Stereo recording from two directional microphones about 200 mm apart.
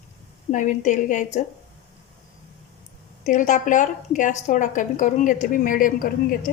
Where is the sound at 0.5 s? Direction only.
40° left (ahead or behind).